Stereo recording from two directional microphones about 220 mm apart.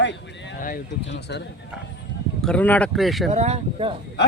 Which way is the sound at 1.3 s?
50° left (ahead or behind).